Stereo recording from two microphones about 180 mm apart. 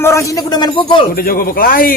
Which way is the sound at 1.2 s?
55° left (ahead or behind).